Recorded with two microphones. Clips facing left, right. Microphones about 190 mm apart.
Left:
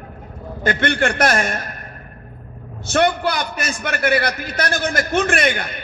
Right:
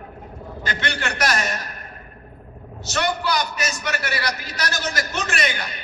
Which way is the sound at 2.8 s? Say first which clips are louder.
Left 6 dB; 55° left (ahead or behind).